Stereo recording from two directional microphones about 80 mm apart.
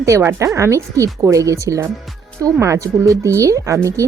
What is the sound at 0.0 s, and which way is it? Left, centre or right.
A woman's voice, right.